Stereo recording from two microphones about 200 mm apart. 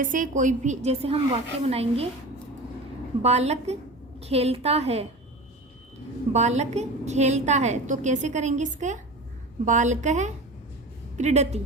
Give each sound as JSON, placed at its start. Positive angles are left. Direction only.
{"t": 0.0, "sound": "a woman's voice", "side_deg": -40}
{"t": 3.2, "sound": "a woman's voice", "side_deg": -35}
{"t": 6.3, "sound": "a woman's voice", "side_deg": -35}